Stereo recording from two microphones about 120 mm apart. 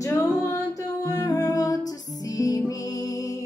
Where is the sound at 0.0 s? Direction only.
25° left (ahead or behind).